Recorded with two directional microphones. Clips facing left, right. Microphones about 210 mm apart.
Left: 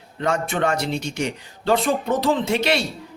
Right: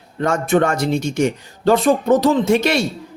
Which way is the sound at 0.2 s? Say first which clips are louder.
Right 6 dB; 45° right (ahead or behind).